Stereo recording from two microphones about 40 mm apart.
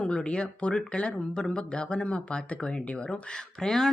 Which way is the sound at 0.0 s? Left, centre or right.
Left.